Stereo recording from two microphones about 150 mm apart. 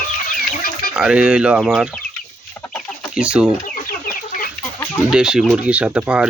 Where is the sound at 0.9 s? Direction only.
5° right (ahead or behind).